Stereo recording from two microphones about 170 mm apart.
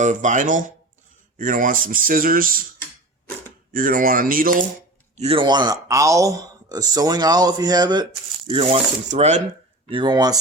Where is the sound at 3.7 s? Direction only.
55° right (ahead or behind).